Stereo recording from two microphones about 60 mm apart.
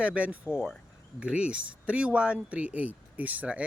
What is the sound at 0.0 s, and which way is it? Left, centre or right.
Speech, right.